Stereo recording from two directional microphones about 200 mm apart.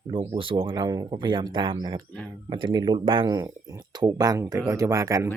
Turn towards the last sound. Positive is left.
turn(degrees=-15)  # may be behind; listen again after turning